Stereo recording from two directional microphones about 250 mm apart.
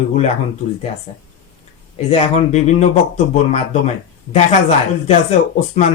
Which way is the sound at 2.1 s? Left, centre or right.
Left.